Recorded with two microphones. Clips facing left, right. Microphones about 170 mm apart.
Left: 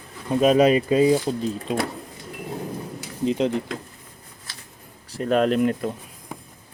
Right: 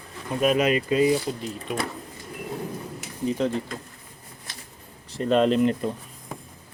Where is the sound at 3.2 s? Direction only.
20° left (ahead or behind).